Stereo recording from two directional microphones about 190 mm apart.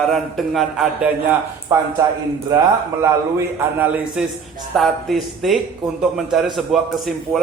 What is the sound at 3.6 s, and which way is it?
A man's voice, 10° right (ahead or behind).